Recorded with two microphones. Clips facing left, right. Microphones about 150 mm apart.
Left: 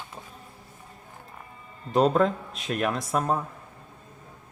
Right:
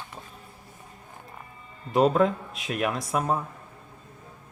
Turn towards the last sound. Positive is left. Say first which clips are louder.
# left 1 dB
turn(degrees=0)  # may be behind; listen again after turning